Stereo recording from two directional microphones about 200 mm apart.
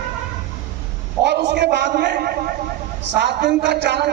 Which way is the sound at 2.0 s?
45° right (ahead or behind).